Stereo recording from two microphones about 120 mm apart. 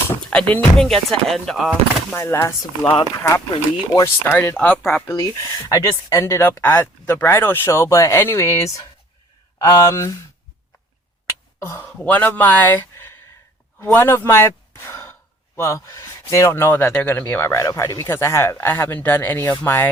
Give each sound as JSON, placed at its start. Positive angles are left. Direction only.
{"t": 0.1, "sound": "speech", "side_deg": 10}
{"t": 2.1, "sound": "speech", "side_deg": 20}
{"t": 11.3, "sound": "a sound", "side_deg": 20}
{"t": 11.9, "sound": "speech", "side_deg": 15}
{"t": 13.7, "sound": "a sound", "side_deg": 20}
{"t": 15.5, "sound": "speech", "side_deg": 25}